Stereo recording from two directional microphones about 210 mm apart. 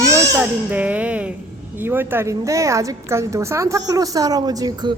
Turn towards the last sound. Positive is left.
turn(degrees=-20)  # may be behind; listen again after turning